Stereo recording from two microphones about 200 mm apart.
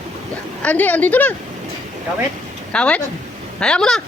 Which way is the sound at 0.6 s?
10° left (ahead or behind).